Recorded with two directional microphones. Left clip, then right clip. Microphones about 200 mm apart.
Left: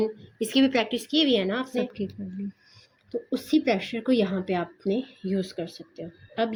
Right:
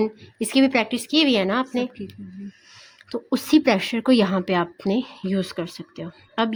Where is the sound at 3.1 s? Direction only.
50° right (ahead or behind).